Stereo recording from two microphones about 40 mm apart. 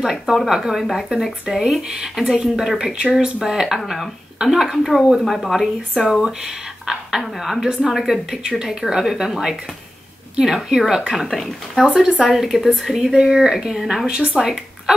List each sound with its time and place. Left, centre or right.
0.0 s a woman's voice: centre
0.7 s speech: centre
1.8 s a woman's voice: centre
2.9 s speech: right
3.4 s a woman's voice: centre
11.1 s speech: centre
11.8 s a woman's voice: centre